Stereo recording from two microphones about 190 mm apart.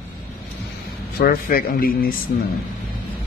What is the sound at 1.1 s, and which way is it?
Speech, 50° left (ahead or behind).